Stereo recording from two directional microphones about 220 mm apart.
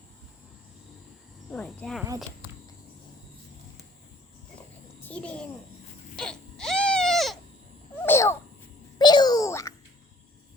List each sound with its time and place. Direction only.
1.5 s speech: 5° left (ahead or behind)
5.0 s a child's voice: 5° left (ahead or behind)
6.1 s baby cry: centre (ahead or behind)
8.0 s babbling: 10° left (ahead or behind)
9.0 s a sound: 20° left (ahead or behind)